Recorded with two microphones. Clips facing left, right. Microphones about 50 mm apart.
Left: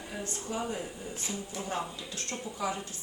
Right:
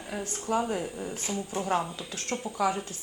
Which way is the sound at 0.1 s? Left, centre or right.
Right.